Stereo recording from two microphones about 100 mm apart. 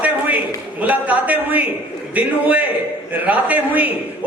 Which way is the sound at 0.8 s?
15° right (ahead or behind).